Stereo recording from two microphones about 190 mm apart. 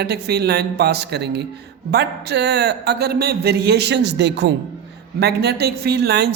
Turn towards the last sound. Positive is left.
turn(degrees=-60)  # may be behind; listen again after turning